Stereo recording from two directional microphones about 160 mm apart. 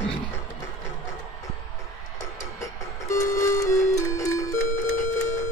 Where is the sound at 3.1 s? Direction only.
20° left (ahead or behind).